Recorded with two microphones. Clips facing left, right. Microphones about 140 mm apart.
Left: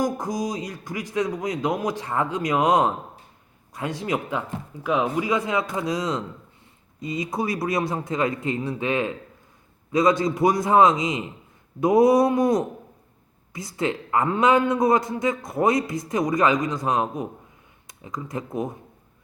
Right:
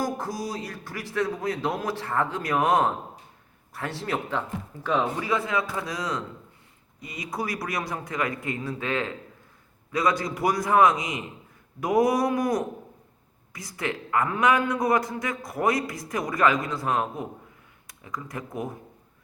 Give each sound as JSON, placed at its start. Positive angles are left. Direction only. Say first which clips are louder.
{"t": 0.0, "sound": "a man's voice", "louder": "left 4 dB", "side_deg": 15}